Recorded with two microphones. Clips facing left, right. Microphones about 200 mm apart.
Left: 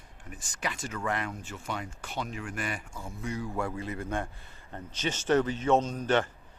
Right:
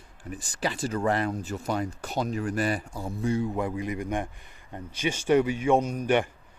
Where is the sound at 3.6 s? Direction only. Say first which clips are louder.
Right 4 dB; 15° right (ahead or behind).